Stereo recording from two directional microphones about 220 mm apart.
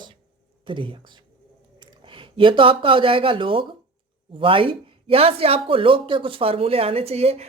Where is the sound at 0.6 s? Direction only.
25° right (ahead or behind).